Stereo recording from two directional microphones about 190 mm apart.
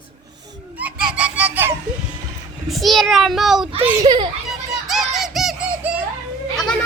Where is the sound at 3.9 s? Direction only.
20° right (ahead or behind).